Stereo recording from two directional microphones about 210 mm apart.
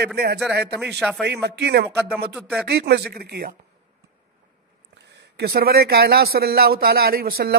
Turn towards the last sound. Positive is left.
turn(degrees=-45)  # may be behind; listen again after turning